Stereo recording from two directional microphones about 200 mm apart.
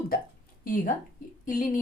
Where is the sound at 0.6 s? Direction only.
45° left (ahead or behind).